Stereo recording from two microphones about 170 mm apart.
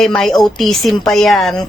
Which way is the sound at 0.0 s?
5° left (ahead or behind).